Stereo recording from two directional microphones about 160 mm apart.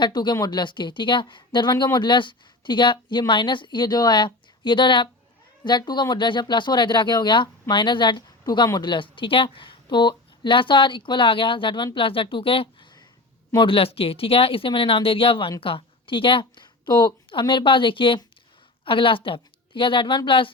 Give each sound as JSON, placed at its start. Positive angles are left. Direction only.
{"t": 0.0, "sound": "a woman's voice", "side_deg": 25}